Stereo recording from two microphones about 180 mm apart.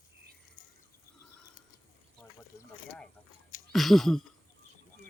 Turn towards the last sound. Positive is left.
turn(degrees=0)  # may be behind; listen again after turning